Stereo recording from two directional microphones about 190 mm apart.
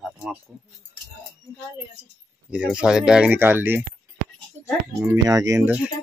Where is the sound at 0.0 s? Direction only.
Centre (ahead or behind).